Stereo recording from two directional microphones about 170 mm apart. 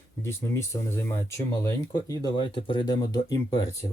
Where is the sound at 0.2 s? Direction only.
15° left (ahead or behind).